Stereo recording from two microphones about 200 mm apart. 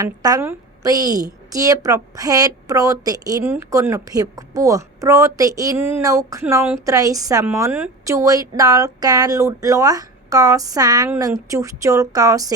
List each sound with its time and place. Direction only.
0.0 s a woman's voice: 20° right (ahead or behind)